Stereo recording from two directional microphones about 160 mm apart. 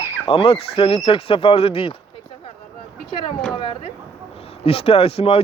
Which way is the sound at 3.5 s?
30° left (ahead or behind).